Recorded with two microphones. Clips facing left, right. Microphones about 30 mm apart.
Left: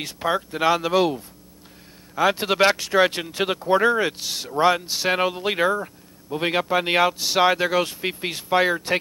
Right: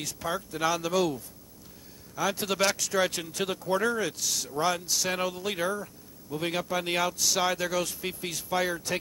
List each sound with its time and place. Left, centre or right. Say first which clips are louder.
0.0 s speech: left 8 dB; left